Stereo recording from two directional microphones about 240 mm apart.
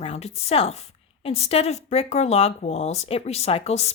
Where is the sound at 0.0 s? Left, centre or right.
Left.